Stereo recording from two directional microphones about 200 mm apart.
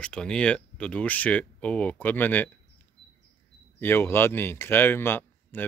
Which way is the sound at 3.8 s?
10° left (ahead or behind).